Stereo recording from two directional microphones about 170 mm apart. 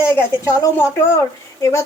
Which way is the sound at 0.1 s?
15° left (ahead or behind).